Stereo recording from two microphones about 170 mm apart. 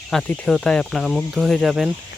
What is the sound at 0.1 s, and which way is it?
Speech, centre (ahead or behind).